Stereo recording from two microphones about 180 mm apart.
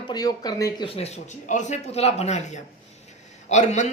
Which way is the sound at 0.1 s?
20° left (ahead or behind).